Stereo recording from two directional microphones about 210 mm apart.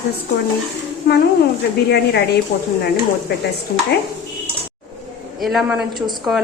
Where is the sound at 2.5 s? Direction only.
45° left (ahead or behind).